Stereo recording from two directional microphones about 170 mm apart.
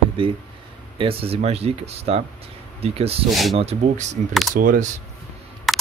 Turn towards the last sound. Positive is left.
turn(degrees=0)  # may be behind; listen again after turning